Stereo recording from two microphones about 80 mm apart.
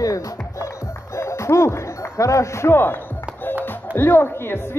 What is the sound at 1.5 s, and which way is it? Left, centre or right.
Music, left.